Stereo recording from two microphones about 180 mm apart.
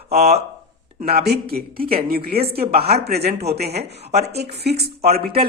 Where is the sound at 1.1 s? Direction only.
60° right (ahead or behind).